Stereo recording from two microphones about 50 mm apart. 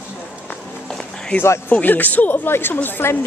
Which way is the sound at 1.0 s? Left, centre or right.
Centre.